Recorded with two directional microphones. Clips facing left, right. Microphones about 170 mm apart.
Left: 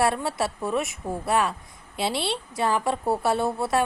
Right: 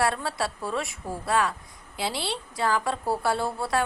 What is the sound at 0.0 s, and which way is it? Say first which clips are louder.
A woman's voice: left 3 dB; 20° left (ahead or behind).